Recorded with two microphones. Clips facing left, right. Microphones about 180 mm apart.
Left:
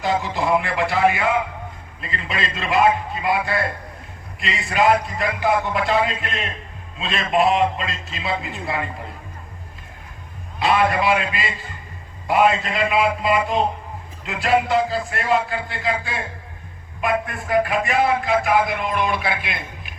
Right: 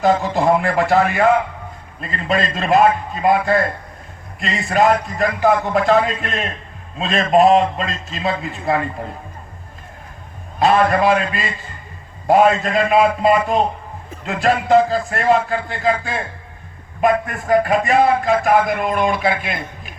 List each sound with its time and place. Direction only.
0.0 s a man's voice: 45° right (ahead or behind)
10.6 s a man's voice: 45° right (ahead or behind)